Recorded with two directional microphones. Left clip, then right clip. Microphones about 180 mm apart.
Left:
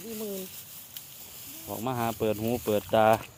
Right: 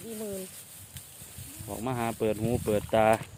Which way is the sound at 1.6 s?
Centre (ahead or behind).